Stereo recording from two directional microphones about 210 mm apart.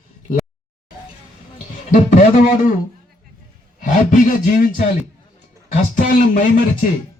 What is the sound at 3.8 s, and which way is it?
Speech, 40° left (ahead or behind).